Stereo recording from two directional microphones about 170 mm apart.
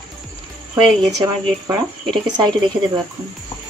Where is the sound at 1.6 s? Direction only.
25° right (ahead or behind).